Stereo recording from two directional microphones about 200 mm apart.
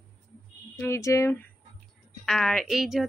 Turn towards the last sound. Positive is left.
turn(degrees=0)  # may be behind; listen again after turning